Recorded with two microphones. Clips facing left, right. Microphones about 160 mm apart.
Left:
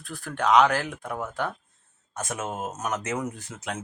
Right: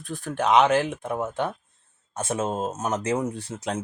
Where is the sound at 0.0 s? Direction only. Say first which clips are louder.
Right 2 dB; 20° right (ahead or behind).